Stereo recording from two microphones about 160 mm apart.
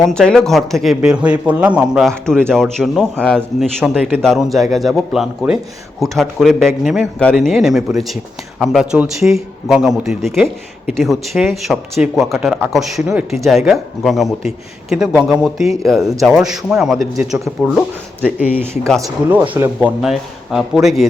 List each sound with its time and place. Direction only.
0.0 s speech: 5° left (ahead or behind)
18.2 s speech: 10° right (ahead or behind)
20.0 s speech: 5° right (ahead or behind)